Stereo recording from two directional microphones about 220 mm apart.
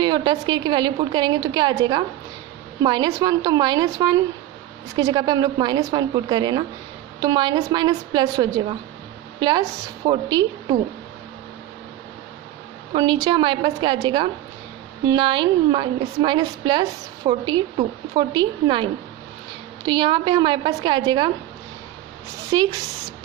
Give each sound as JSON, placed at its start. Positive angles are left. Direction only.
{"t": 0.0, "sound": "a woman's voice", "side_deg": -20}
{"t": 12.9, "sound": "a woman's voice", "side_deg": -20}
{"t": 22.4, "sound": "a woman's voice", "side_deg": -15}